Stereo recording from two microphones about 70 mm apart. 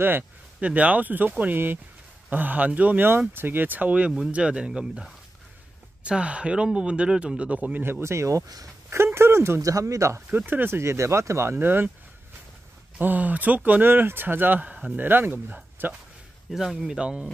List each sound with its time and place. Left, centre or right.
0.0 s a sound: right
0.7 s speech: right
6.0 s speech: centre
7.8 s speech: right
8.9 s speech: right
9.6 s speech: right
10.3 s speech: right
10.8 s speech: right
11.5 s speech: right
13.0 s speech: right
15.0 s speech: right
16.4 s speech: centre